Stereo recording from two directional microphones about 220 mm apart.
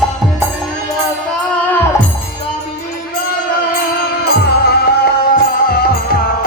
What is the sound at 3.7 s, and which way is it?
Music, 45° left (ahead or behind).